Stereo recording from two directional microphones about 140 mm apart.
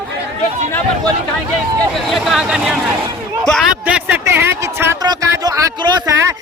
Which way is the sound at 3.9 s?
10° right (ahead or behind).